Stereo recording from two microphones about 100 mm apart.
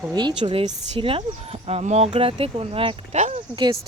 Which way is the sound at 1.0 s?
60° right (ahead or behind).